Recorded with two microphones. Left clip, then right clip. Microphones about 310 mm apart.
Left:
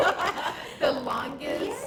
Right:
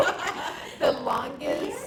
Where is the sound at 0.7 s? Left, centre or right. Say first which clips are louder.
Right 3 dB; centre.